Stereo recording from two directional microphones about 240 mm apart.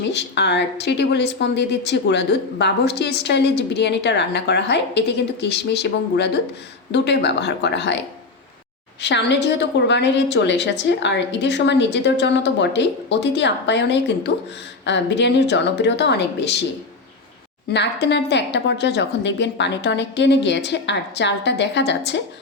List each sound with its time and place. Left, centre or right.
0.1 s a woman's voice: left
17.7 s a woman's voice: left